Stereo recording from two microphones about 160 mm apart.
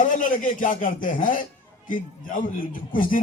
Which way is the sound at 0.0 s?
55° left (ahead or behind).